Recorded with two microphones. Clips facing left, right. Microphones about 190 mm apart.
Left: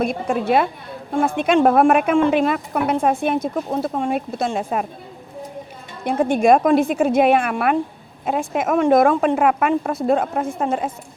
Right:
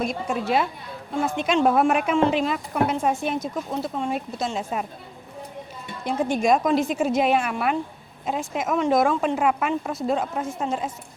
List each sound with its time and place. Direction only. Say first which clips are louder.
0.0 s a woman's voice: left 5 dB; 55° left (ahead or behind)
6.1 s a woman's voice: left 6 dB; 55° left (ahead or behind)